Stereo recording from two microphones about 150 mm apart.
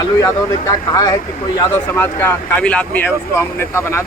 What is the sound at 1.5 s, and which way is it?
Speech, 15° left (ahead or behind).